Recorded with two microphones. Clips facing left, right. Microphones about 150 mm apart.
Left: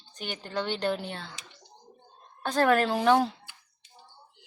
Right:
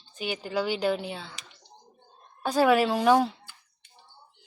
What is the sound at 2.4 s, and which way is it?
Speech, 10° right (ahead or behind).